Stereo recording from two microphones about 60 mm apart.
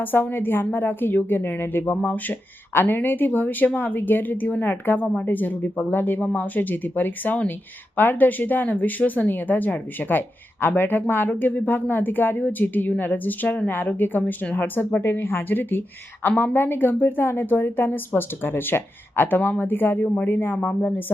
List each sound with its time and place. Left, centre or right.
0.0 s speech: left